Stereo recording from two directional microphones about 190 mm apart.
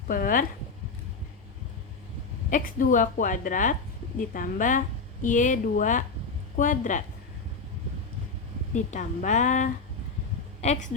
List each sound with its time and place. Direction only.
0.1 s a woman's voice: 45° left (ahead or behind)
2.5 s a woman's voice: 45° left (ahead or behind)
8.7 s a woman's voice: 40° left (ahead or behind)